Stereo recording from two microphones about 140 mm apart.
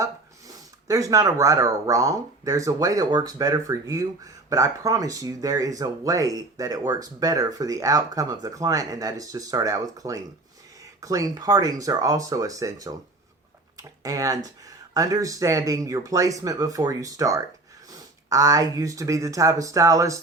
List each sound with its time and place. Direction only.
0.0 s speech: 25° right (ahead or behind)
14.0 s speech: 25° right (ahead or behind)